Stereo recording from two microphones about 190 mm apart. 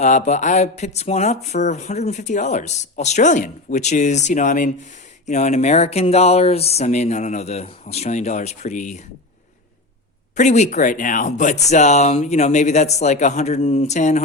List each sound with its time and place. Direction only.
0.0 s speech: 40° left (ahead or behind)
10.3 s speech: 35° left (ahead or behind)